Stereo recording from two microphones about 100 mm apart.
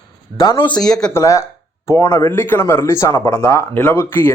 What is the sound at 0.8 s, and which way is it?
Speech, 5° left (ahead or behind).